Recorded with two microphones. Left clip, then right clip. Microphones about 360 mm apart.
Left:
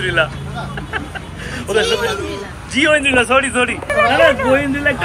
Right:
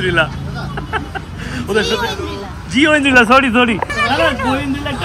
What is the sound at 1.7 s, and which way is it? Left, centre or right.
Speech, centre.